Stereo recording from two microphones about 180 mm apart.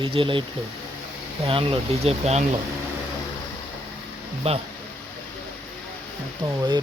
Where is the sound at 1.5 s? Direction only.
30° right (ahead or behind).